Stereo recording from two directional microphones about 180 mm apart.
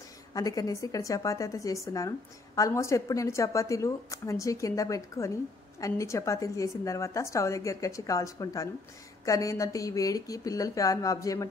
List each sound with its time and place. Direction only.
0.3 s a woman's voice: 20° left (ahead or behind)